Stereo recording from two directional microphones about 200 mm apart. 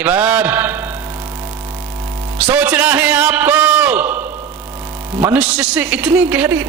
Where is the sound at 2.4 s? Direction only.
5° right (ahead or behind).